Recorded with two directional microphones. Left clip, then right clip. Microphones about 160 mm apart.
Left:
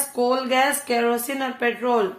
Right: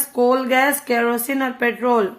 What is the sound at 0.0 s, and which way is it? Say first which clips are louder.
Speech: right 4 dB; 60° right (ahead or behind).